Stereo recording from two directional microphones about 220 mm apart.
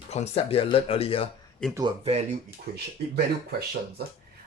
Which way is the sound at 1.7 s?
15° right (ahead or behind).